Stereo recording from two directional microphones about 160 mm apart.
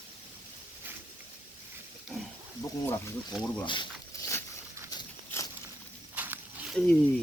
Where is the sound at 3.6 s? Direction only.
30° left (ahead or behind).